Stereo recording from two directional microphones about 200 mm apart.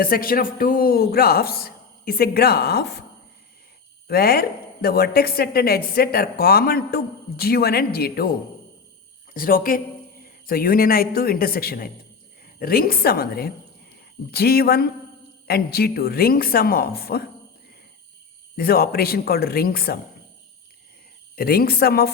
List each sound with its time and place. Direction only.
0.0 s a woman's voice: 45° left (ahead or behind)
4.1 s a woman's voice: 50° left (ahead or behind)
9.3 s a woman's voice: 45° left (ahead or behind)
18.5 s a woman's voice: 50° left (ahead or behind)
21.3 s a woman's voice: 50° left (ahead or behind)